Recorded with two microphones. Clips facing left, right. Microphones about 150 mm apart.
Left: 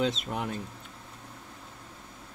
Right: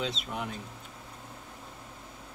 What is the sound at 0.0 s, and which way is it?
Speech, 50° left (ahead or behind).